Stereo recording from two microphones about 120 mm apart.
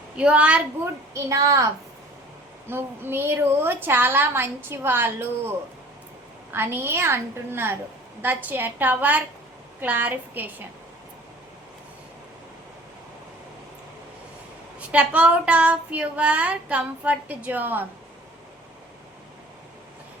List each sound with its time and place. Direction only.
0.2 s a woman's voice: 10° right (ahead or behind)
1.1 s a woman's voice: 25° right (ahead or behind)
2.6 s a woman's voice: 20° right (ahead or behind)
14.8 s a woman's voice: 10° right (ahead or behind)